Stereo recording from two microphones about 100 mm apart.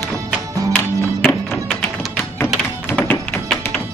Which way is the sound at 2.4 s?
20° left (ahead or behind).